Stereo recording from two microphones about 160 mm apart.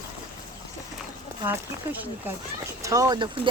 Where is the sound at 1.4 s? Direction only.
10° right (ahead or behind).